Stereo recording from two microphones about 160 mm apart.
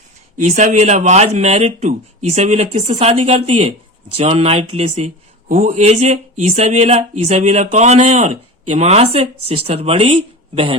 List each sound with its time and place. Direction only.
0.4 s speech: 45° right (ahead or behind)